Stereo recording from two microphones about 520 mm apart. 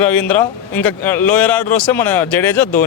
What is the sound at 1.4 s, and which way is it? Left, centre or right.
Speech, left.